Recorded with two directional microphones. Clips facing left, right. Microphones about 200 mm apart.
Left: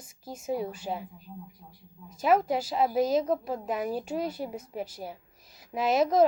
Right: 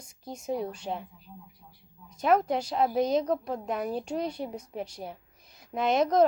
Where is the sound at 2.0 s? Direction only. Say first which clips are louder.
Even; 5° left (ahead or behind).